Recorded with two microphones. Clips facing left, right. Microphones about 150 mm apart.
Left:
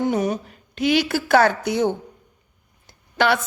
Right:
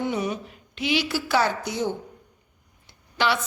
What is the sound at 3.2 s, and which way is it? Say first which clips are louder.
Speech: left 5 dB; 50° left (ahead or behind).